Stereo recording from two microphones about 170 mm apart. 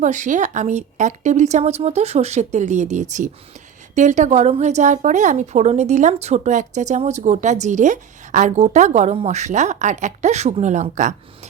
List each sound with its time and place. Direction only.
0.0 s speech: 45° right (ahead or behind)